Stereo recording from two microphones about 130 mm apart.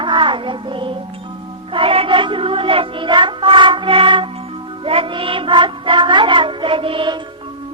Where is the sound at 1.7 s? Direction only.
45° right (ahead or behind).